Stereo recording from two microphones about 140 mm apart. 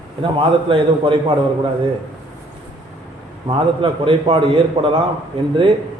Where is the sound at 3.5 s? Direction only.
40° right (ahead or behind).